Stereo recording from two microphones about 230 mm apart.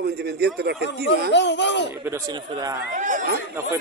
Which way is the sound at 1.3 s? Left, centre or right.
Left.